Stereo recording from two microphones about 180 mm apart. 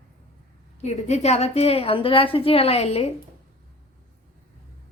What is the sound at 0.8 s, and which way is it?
Music, 40° left (ahead or behind).